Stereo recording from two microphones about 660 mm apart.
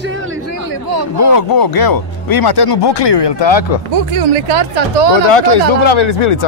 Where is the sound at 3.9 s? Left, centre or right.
Right.